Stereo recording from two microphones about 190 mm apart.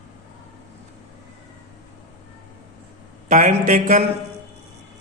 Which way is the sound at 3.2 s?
40° right (ahead or behind).